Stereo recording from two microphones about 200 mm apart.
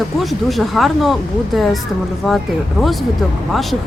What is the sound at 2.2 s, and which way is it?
Speech, centre (ahead or behind).